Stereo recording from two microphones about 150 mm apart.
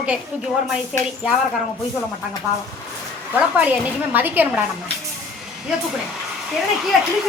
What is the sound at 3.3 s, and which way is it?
A woman's voice, 10° right (ahead or behind).